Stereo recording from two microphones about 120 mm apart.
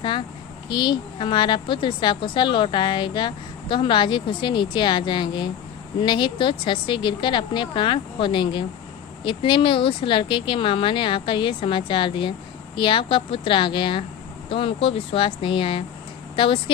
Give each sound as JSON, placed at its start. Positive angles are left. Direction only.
{"t": 0.7, "sound": "a woman's voice", "side_deg": 40}